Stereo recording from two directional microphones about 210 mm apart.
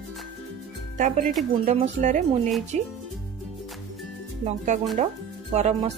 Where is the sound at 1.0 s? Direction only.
35° right (ahead or behind).